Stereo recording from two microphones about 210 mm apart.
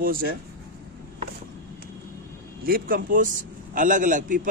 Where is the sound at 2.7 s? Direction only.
45° right (ahead or behind).